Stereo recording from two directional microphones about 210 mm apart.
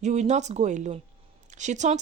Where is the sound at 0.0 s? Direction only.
35° right (ahead or behind).